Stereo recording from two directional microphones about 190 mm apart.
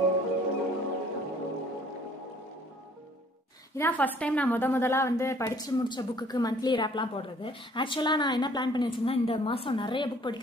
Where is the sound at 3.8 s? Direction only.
10° left (ahead or behind).